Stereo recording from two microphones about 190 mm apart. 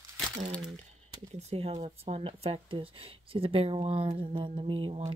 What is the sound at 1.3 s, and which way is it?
Speech, 35° right (ahead or behind).